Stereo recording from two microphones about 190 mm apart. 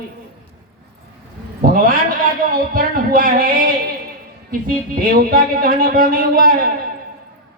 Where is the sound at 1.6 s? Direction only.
50° right (ahead or behind).